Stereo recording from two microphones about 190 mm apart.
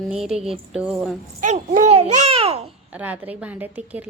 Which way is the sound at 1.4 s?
40° right (ahead or behind).